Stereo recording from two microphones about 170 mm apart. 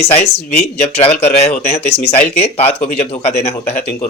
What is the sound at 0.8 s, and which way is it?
Speech, 35° left (ahead or behind).